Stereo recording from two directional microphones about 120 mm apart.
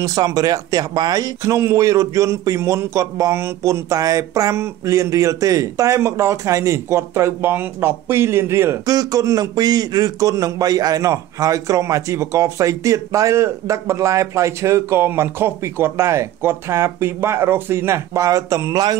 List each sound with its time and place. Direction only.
0.0 s a man's voice: 30° right (ahead or behind)
8.8 s a man's voice: 30° right (ahead or behind)